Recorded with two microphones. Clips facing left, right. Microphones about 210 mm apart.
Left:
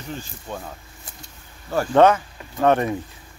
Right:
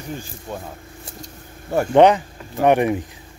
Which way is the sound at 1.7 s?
20° right (ahead or behind).